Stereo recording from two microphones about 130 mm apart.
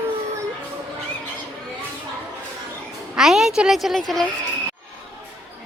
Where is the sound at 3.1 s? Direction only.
Centre (ahead or behind).